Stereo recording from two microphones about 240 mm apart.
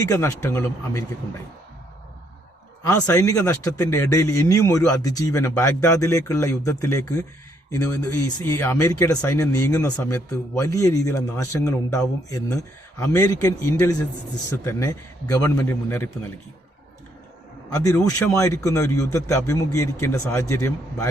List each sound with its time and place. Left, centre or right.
0.0 s speech: centre
2.8 s speech: centre
7.7 s speech: left
8.4 s speech: centre
17.7 s speech: centre